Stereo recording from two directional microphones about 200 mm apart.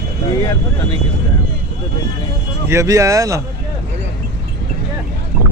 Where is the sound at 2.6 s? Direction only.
15° right (ahead or behind).